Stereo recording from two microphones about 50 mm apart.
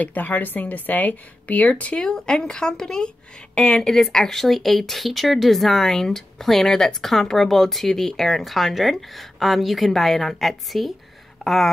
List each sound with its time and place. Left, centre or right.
0.0 s speech: left
2.0 s speech: centre